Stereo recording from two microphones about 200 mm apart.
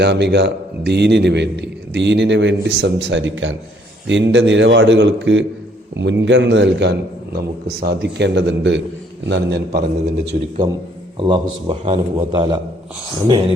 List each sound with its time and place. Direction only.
0.0 s a man's voice: 60° right (ahead or behind)
10.3 s a man's voice: 35° right (ahead or behind)
11.2 s a man's voice: 25° right (ahead or behind)